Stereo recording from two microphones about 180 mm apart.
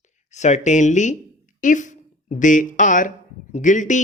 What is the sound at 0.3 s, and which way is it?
A man's voice, 40° left (ahead or behind).